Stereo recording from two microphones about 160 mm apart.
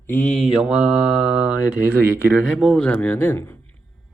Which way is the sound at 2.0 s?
10° right (ahead or behind).